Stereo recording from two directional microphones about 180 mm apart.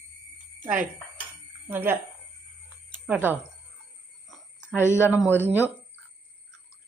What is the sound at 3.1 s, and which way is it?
Speech, 10° right (ahead or behind).